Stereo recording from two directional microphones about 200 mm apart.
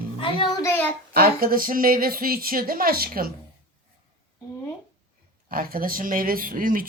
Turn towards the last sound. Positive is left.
turn(degrees=-45)  # may be behind; listen again after turning